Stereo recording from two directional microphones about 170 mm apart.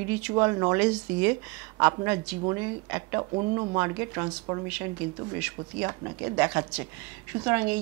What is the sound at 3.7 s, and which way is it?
A woman's voice, 15° right (ahead or behind).